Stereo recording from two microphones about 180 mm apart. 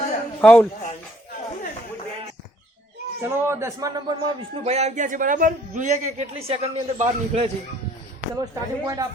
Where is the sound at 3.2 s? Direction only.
15° right (ahead or behind).